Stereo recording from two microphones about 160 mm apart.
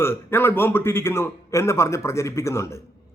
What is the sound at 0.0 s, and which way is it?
Speech, 15° left (ahead or behind).